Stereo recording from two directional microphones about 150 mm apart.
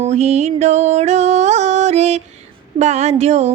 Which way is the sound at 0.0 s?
45° right (ahead or behind).